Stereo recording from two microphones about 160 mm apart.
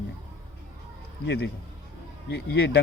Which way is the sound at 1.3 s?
90° left.